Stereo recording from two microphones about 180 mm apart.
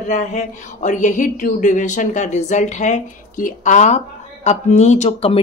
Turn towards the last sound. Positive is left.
turn(degrees=35)  # may be behind; listen again after turning